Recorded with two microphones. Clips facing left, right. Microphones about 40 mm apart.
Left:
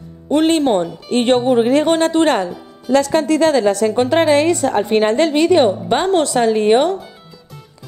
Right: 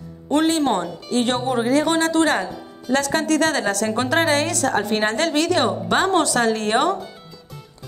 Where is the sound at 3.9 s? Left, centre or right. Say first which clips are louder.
Left 4 dB; left.